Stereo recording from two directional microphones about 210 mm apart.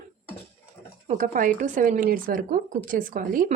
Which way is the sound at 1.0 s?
40° right (ahead or behind).